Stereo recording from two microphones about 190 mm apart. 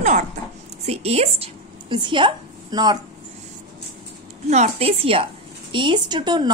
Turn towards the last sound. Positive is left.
turn(degrees=-20)  # may be behind; listen again after turning